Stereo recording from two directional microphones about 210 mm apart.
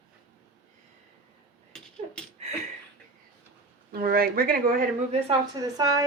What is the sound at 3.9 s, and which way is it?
Speech, 45° right (ahead or behind).